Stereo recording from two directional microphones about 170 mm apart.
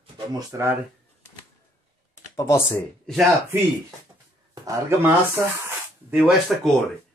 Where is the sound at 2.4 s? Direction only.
20° left (ahead or behind).